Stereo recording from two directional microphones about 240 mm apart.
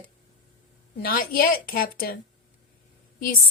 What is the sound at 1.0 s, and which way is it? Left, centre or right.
A woman's voice, left.